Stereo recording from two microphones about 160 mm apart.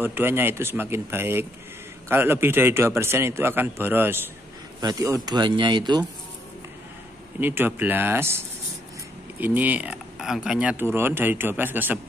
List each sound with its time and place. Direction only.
0.0 s speech: 15° right (ahead or behind)
7.3 s speech: 10° right (ahead or behind)